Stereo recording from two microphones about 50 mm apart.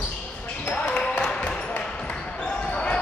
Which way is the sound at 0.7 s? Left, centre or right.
Left.